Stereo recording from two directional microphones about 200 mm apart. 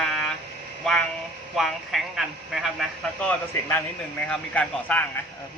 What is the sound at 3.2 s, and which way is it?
Speech, 10° left (ahead or behind).